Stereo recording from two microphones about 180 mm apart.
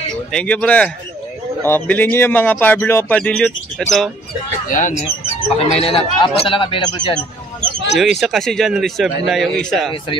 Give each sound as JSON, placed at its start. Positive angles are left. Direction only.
{"t": 0.3, "sound": "speech", "side_deg": 5}
{"t": 4.6, "sound": "speech", "side_deg": 45}
{"t": 8.0, "sound": "a man's voice", "side_deg": 0}